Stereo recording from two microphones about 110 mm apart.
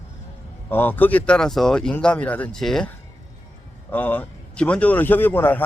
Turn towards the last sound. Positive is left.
turn(degrees=15)  # may be behind; listen again after turning